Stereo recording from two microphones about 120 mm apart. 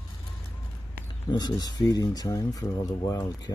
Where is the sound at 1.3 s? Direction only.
35° left (ahead or behind).